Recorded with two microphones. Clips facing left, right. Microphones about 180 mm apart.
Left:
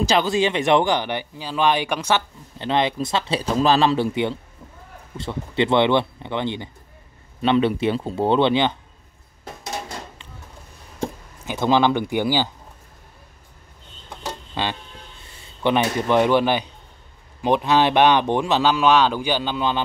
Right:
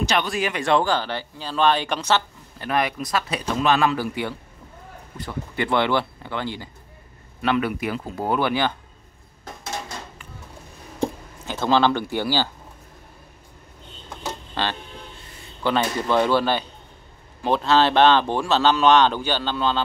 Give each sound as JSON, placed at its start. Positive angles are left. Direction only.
{"t": 0.1, "sound": "speech", "side_deg": 25}
{"t": 2.6, "sound": "speech", "side_deg": 25}
{"t": 11.4, "sound": "speech", "side_deg": 15}
{"t": 14.5, "sound": "a sound", "side_deg": 15}
{"t": 15.6, "sound": "speech", "side_deg": 20}